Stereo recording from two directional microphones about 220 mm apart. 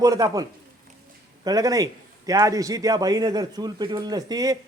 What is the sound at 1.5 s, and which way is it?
A man's voice, 15° right (ahead or behind).